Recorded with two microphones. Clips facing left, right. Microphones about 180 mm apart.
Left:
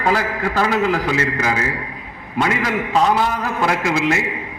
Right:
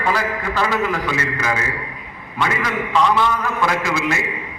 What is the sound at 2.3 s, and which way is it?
A man's voice, 40° left (ahead or behind).